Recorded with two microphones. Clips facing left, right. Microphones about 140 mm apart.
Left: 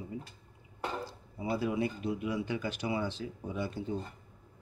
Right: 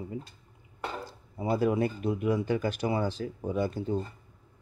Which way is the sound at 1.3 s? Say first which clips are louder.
Right 6 dB; 50° right (ahead or behind).